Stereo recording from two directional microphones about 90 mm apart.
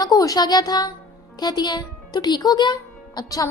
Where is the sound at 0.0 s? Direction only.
45° left (ahead or behind).